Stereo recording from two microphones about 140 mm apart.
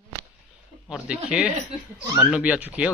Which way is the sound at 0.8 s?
5° right (ahead or behind).